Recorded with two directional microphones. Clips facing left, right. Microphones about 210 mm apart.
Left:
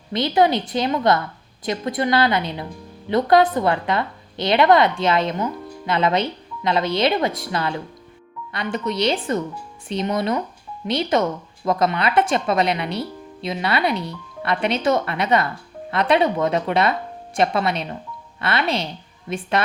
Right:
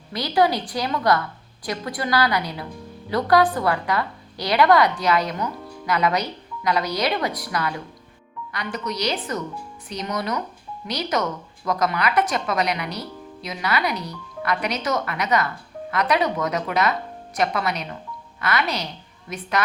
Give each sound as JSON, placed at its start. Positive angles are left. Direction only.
{"t": 0.1, "sound": "a woman's voice", "side_deg": 25}